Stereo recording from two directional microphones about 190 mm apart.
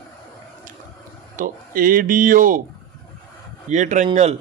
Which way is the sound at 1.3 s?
45° right (ahead or behind).